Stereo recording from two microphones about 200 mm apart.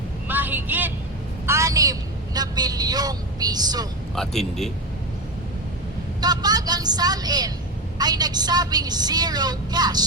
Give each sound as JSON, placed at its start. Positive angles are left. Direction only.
{"t": 0.3, "sound": "vehicle", "side_deg": -10}
{"t": 4.1, "sound": "a man's voice", "side_deg": 0}
{"t": 6.1, "sound": "vehicle", "side_deg": -20}
{"t": 7.9, "sound": "a woman's voice", "side_deg": -20}